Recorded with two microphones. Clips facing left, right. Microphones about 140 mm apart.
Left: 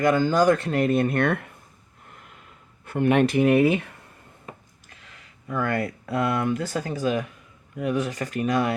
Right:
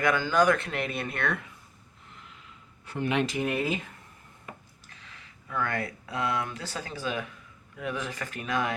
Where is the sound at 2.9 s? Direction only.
55° left (ahead or behind).